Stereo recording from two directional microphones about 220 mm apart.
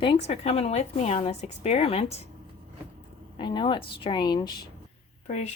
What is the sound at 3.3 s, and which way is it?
A woman's voice, 20° left (ahead or behind).